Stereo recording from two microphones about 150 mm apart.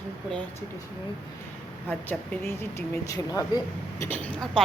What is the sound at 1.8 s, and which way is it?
A woman's voice, 10° left (ahead or behind).